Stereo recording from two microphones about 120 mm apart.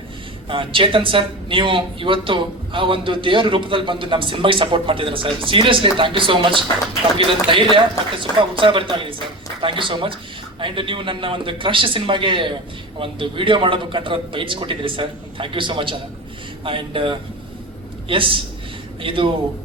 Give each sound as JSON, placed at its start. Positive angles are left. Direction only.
{"t": 0.4, "sound": "speech", "side_deg": -45}